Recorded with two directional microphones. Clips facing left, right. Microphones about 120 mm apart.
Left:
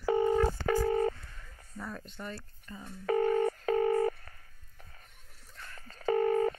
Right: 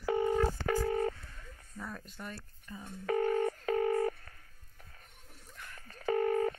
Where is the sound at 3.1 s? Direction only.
30° left (ahead or behind).